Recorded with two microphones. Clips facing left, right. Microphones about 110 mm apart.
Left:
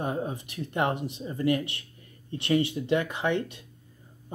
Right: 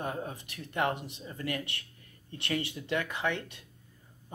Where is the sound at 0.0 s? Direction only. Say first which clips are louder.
Left 5 dB; 20° left (ahead or behind).